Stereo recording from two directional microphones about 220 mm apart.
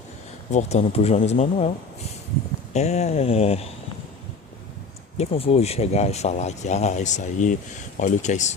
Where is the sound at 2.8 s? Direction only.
30° left (ahead or behind).